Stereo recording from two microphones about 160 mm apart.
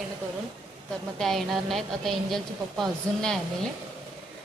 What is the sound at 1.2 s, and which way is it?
A woman's voice, centre (ahead or behind).